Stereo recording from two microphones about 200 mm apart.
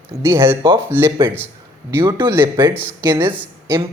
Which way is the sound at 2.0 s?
25° right (ahead or behind).